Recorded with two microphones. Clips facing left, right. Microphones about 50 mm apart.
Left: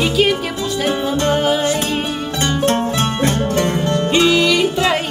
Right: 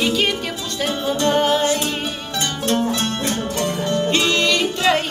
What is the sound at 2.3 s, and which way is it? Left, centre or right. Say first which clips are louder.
Music: left 4 dB; left.